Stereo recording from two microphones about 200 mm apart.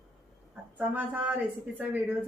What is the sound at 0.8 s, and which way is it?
A woman's voice, 10° right (ahead or behind).